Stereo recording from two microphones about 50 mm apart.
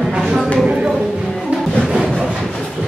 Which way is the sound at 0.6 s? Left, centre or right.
Centre.